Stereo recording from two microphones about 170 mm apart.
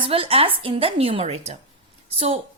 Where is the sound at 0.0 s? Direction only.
35° right (ahead or behind).